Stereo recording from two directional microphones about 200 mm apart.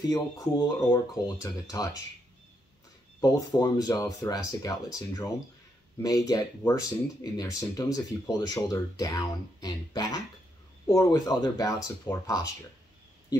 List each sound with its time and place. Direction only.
0.1 s speech: 15° left (ahead or behind)
3.2 s speech: 20° left (ahead or behind)